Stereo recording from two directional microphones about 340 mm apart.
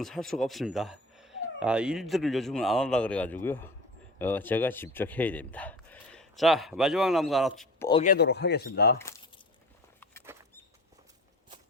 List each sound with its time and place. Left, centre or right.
0.0 s speech: centre
7.9 s speech: centre
8.1 s speech: left
9.0 s a sound: centre
10.3 s rodents: centre